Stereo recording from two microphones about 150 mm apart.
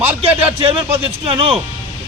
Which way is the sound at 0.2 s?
40° right (ahead or behind).